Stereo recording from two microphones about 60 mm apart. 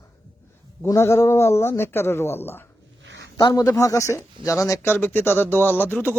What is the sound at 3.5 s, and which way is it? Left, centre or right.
Speech, left.